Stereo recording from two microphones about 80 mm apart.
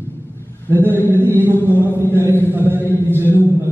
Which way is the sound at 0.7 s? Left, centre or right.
Right.